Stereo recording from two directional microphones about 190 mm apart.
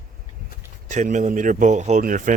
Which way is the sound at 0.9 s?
40° right (ahead or behind).